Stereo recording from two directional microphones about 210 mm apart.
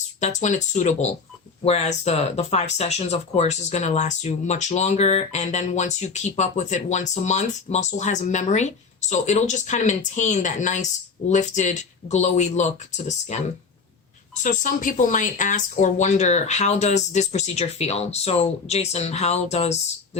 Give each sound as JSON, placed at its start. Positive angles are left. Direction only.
{"t": 0.2, "sound": "speech", "side_deg": 35}
{"t": 14.4, "sound": "speech", "side_deg": 35}